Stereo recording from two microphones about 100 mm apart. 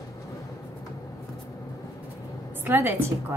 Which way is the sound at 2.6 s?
20° right (ahead or behind).